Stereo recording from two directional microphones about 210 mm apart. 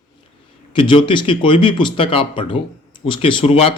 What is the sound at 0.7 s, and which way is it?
Speech, 25° left (ahead or behind).